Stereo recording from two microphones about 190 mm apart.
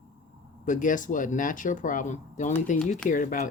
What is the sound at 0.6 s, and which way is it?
Speech, 45° left (ahead or behind).